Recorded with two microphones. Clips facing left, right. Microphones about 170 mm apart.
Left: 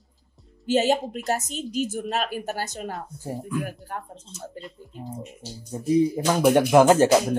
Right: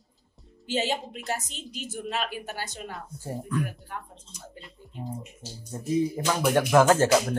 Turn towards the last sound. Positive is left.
turn(degrees=15)  # may be behind; listen again after turning